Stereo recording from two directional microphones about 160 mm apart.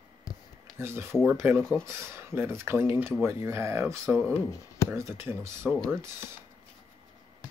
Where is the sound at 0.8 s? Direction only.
15° right (ahead or behind).